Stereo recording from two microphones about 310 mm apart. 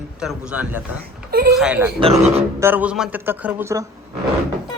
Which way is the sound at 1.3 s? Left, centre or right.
Right.